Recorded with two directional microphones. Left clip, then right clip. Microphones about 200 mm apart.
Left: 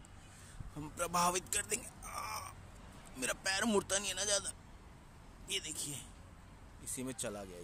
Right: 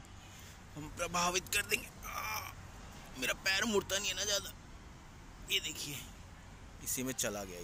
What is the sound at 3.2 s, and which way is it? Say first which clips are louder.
Speech: right 3 dB; 25° left (ahead or behind).